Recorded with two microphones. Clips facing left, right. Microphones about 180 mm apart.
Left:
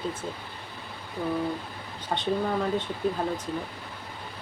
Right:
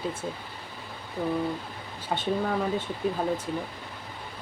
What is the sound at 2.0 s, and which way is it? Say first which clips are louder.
Speech: even; 5° right (ahead or behind).